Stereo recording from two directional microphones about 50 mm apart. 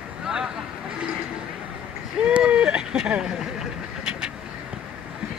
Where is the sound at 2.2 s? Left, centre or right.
Centre.